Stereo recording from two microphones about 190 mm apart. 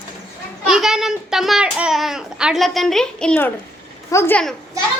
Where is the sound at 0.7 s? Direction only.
5° right (ahead or behind).